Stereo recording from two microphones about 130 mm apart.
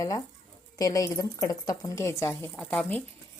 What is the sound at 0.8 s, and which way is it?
Speech, 25° left (ahead or behind).